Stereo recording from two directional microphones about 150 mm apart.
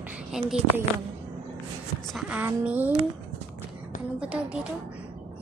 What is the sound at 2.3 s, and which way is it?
Speech, 10° right (ahead or behind).